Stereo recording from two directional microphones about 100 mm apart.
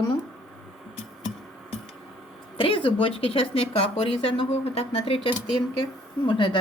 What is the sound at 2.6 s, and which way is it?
A woman's voice, 60° left (ahead or behind).